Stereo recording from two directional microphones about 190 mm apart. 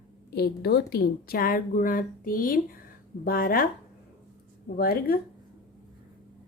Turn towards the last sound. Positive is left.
turn(degrees=55)  # may be behind; listen again after turning